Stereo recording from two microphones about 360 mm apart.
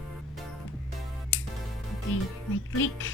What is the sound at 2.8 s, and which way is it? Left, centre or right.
Speech, left.